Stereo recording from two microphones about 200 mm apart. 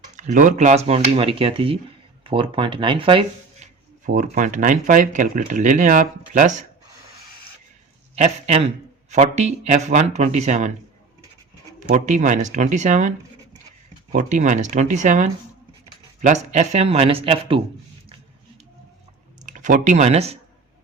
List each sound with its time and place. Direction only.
0.2 s speech: 40° right (ahead or behind)
4.0 s speech: 40° right (ahead or behind)
8.1 s speech: 35° right (ahead or behind)
11.9 s speech: 35° right (ahead or behind)
19.5 s speech: 40° right (ahead or behind)